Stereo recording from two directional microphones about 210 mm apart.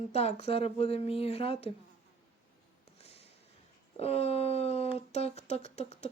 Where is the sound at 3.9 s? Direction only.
30° left (ahead or behind).